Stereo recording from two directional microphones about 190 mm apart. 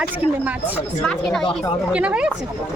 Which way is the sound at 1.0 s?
Centre (ahead or behind).